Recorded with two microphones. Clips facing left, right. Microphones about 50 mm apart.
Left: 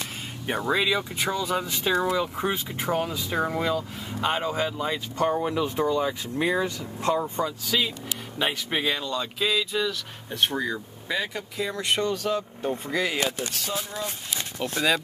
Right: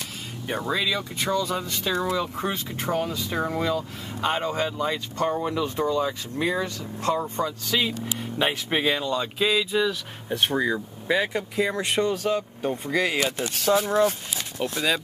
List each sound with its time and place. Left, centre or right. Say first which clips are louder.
0.7 s speech: left 3 dB; centre
13.6 s speech: right 11 dB; right
14.6 s speech: right 2 dB; centre